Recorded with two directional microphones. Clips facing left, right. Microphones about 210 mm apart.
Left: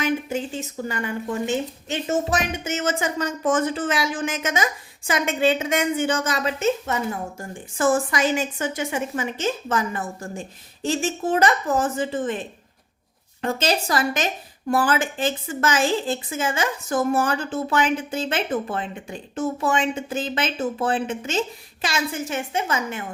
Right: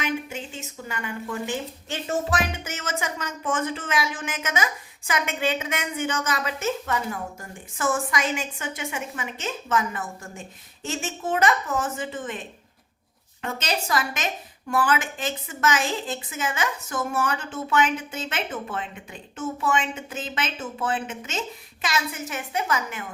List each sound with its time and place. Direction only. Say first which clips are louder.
0.0 s speech: left 5 dB; 35° left (ahead or behind)
13.4 s a woman's voice: left 6 dB; 35° left (ahead or behind)